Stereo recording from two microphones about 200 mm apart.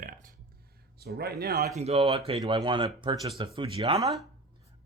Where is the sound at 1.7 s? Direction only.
30° right (ahead or behind).